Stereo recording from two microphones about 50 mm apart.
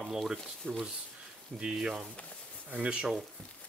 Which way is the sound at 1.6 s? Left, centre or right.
Centre.